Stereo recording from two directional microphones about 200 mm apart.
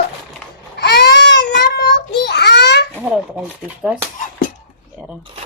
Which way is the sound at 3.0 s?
5° right (ahead or behind).